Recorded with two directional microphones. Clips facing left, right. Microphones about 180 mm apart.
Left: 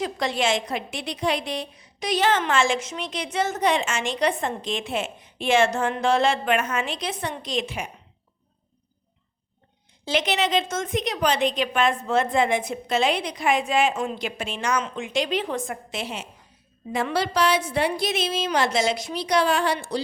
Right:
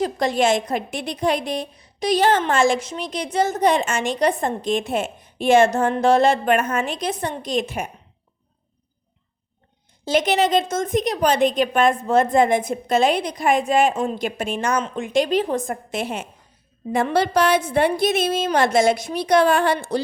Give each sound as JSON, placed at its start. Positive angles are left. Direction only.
{"t": 0.0, "sound": "a woman's voice", "side_deg": -45}
{"t": 2.0, "sound": "a woman's voice", "side_deg": -35}
{"t": 10.1, "sound": "a woman's voice", "side_deg": -45}